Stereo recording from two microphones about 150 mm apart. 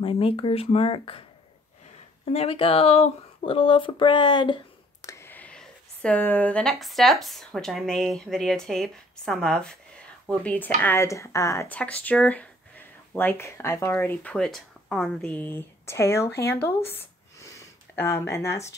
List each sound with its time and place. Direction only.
0.0 s speech: 35° left (ahead or behind)
2.2 s speech: 40° left (ahead or behind)
5.0 s speech: 20° left (ahead or behind)
16.9 s a sound: 15° left (ahead or behind)